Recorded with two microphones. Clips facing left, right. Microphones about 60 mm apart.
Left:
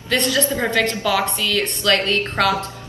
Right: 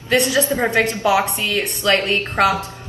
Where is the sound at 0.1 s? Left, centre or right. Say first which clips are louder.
Right 3 dB; centre.